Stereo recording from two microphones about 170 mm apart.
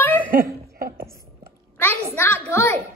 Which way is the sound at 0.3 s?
60° right (ahead or behind).